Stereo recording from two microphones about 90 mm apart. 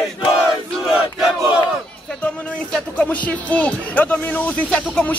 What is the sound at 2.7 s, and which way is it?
Speech, 15° left (ahead or behind).